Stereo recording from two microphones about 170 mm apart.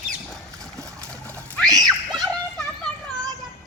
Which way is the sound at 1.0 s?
10° left (ahead or behind).